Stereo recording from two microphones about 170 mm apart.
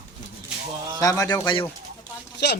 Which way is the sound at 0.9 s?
20° left (ahead or behind).